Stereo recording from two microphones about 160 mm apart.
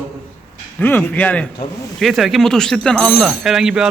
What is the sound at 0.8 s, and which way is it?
Speech, 10° left (ahead or behind).